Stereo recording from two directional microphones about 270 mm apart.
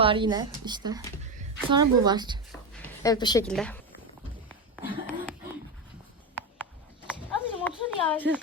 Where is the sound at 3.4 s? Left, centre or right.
Centre.